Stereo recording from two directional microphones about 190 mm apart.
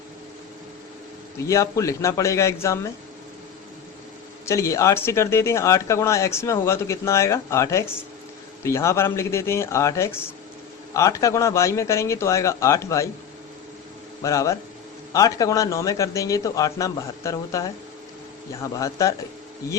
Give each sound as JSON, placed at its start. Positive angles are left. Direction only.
{"t": 1.5, "sound": "speech", "side_deg": 15}
{"t": 4.4, "sound": "speech", "side_deg": 15}
{"t": 14.2, "sound": "speech", "side_deg": 15}